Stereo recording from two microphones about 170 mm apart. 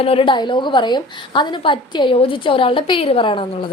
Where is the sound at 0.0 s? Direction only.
35° left (ahead or behind).